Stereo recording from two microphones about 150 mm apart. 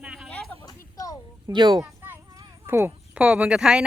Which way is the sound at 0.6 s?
25° left (ahead or behind).